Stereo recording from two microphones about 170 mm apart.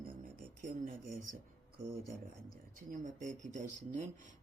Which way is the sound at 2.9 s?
50° right (ahead or behind).